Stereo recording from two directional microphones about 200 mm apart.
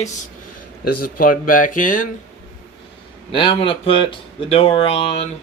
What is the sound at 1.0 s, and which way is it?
Speech, 45° left (ahead or behind).